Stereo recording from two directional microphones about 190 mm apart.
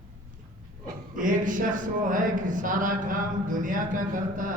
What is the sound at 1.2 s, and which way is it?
Speech, 45° right (ahead or behind).